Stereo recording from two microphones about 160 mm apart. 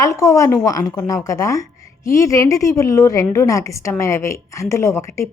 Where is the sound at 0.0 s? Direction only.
20° left (ahead or behind).